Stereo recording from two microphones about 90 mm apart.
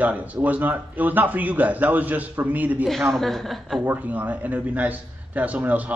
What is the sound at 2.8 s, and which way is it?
Speech, centre (ahead or behind).